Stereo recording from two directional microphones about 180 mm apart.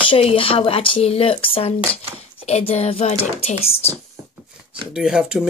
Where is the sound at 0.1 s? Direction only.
30° left (ahead or behind).